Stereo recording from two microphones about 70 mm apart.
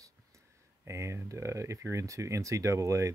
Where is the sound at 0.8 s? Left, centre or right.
Right.